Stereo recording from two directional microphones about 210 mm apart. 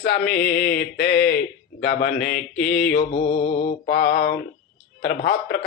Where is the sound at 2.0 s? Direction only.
40° left (ahead or behind).